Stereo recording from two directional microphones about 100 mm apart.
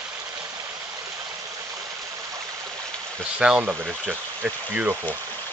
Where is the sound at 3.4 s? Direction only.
10° right (ahead or behind).